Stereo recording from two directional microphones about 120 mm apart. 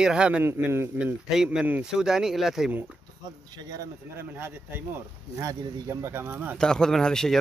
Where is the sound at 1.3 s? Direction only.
5° right (ahead or behind).